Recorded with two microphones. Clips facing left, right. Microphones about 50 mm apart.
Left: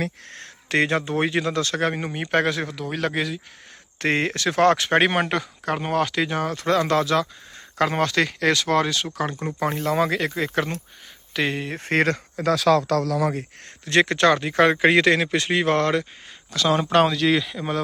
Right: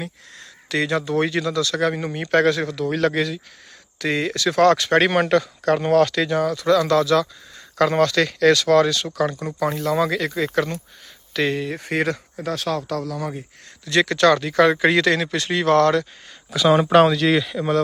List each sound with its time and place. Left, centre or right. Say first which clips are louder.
0.3 s speech: left 2 dB; left
2.0 s speech: right 4 dB; centre
2.8 s speech: right 5 dB; centre
3.9 s speech: even; left; by 6.2 s centre
6.2 s speech: right 4 dB; left
11.9 s speech: left 3 dB; left
12.5 s speech: left 6 dB; left
12.9 s speech: left 5 dB; left
13.8 s speech: right 1 dB; left
16.5 s a man's voice: right 5 dB; centre